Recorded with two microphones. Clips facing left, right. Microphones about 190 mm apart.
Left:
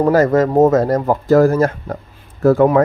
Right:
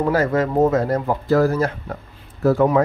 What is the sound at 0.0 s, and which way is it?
Speech, 40° left (ahead or behind).